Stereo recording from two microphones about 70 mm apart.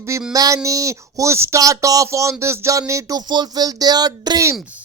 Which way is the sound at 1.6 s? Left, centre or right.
Right.